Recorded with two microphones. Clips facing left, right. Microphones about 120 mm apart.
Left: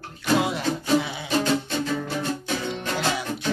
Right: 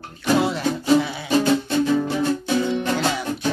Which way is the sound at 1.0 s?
20° left (ahead or behind).